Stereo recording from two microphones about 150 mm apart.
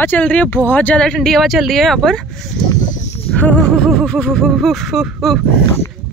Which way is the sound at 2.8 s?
55° left (ahead or behind).